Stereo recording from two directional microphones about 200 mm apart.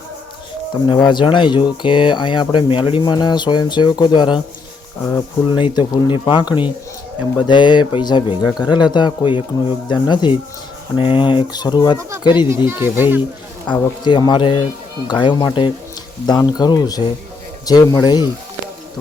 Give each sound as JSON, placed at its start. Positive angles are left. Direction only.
{"t": 0.7, "sound": "speech", "side_deg": 20}
{"t": 12.6, "sound": "speech", "side_deg": -10}
{"t": 13.7, "sound": "speech", "side_deg": 20}